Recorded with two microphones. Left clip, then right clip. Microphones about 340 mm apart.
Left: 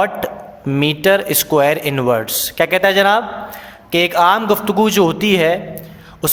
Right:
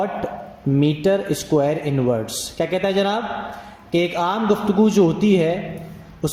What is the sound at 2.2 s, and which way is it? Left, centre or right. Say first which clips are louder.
A man's voice: left 7 dB; left.